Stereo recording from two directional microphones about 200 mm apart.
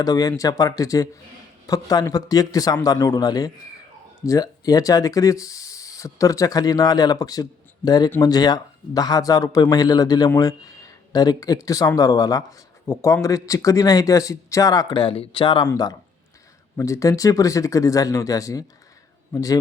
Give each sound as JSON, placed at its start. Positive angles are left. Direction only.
{"t": 0.0, "sound": "a man's voice", "side_deg": 15}